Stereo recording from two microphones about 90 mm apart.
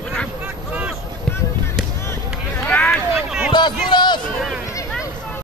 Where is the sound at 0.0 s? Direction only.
10° left (ahead or behind).